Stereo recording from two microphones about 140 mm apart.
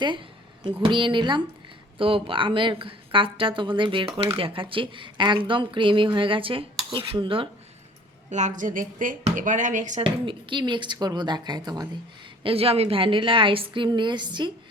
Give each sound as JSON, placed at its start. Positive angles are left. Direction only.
{"t": 0.6, "sound": "speech", "side_deg": -40}
{"t": 8.3, "sound": "a woman's voice", "side_deg": -60}
{"t": 10.0, "sound": "speech", "side_deg": -35}
{"t": 12.4, "sound": "speech", "side_deg": -40}